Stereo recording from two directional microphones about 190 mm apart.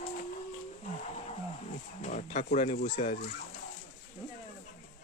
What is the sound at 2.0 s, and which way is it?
Speech, 40° left (ahead or behind).